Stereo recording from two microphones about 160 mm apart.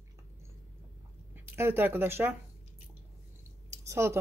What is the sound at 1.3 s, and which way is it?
Squish, 15° right (ahead or behind).